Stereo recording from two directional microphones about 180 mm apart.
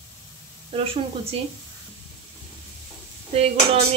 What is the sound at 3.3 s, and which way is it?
Speech, 35° right (ahead or behind).